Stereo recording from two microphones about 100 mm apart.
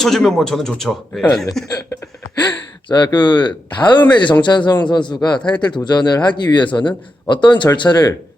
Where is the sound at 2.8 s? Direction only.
50° left (ahead or behind).